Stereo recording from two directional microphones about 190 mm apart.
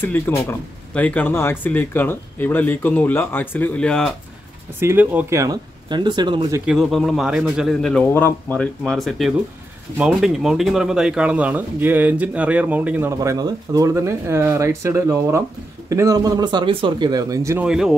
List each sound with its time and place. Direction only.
0.0 s speech: 15° left (ahead or behind)
4.7 s speech: 10° right (ahead or behind)
6.6 s a man's voice: centre (ahead or behind)
17.6 s a man's voice: centre (ahead or behind)